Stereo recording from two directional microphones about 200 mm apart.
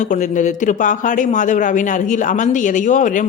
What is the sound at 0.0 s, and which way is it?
A man's voice, 40° left (ahead or behind).